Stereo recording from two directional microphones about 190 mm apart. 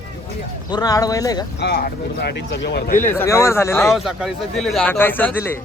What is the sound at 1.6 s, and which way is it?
Speech, 60° left (ahead or behind).